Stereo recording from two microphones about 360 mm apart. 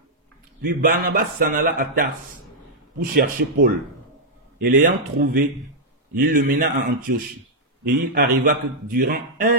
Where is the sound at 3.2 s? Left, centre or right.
Right.